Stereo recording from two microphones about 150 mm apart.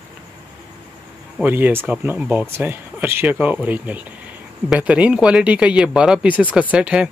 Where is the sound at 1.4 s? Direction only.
15° right (ahead or behind).